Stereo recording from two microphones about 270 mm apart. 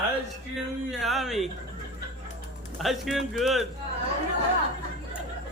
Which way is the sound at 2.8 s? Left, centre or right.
Centre.